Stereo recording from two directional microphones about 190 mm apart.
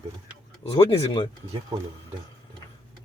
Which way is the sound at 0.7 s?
30° left (ahead or behind).